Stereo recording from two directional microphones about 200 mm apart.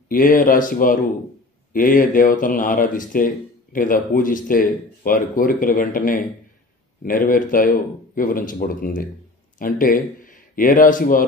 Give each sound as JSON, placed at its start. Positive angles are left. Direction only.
{"t": 0.1, "sound": "speech", "side_deg": 45}